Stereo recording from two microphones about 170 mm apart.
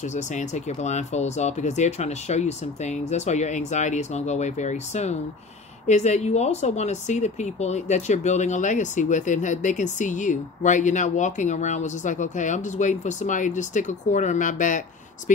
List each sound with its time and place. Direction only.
0.0 s speech: 45° left (ahead or behind)